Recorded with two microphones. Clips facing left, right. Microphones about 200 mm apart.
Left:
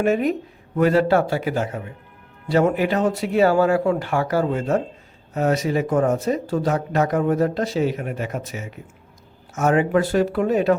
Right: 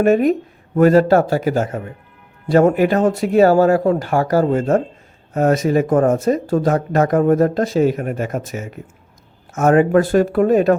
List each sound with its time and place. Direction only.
0.0 s speech: 45° right (ahead or behind)